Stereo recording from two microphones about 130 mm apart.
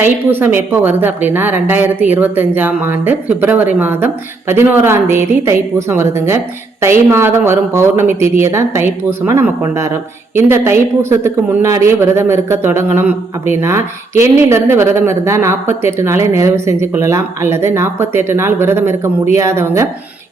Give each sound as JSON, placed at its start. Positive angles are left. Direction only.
{"t": 0.0, "sound": "a woman's voice", "side_deg": -15}